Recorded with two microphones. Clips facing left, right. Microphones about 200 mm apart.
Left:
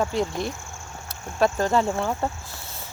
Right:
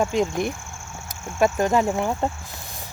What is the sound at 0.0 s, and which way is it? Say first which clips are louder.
Speech: right 3 dB; 15° right (ahead or behind).